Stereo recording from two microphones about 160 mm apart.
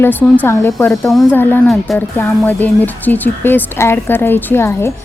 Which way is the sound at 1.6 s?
Centre (ahead or behind).